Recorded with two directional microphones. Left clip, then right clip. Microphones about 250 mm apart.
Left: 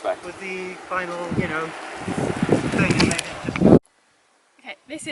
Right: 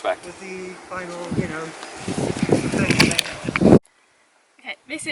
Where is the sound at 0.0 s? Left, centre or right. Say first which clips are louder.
Right 1 dB; centre.